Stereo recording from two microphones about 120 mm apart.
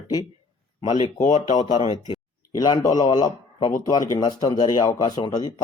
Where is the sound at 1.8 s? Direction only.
45° left (ahead or behind).